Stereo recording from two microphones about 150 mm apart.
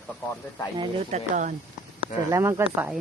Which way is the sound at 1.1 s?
55° right (ahead or behind).